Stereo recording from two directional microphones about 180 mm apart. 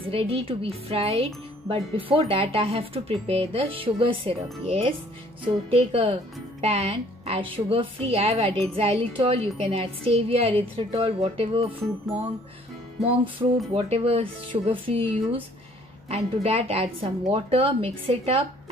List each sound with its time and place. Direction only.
0.1 s speech: 30° right (ahead or behind)
13.0 s music: 30° right (ahead or behind)
13.7 s speech: 30° right (ahead or behind)